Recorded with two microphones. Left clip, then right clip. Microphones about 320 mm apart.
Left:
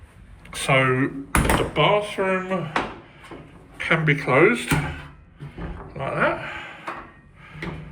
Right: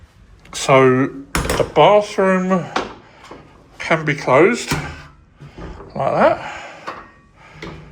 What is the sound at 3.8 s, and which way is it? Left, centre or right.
Speech, centre.